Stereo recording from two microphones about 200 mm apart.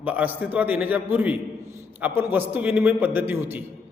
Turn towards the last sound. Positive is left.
turn(degrees=-10)  # may be behind; listen again after turning